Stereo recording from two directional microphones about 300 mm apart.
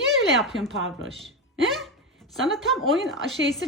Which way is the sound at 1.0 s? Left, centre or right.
Centre.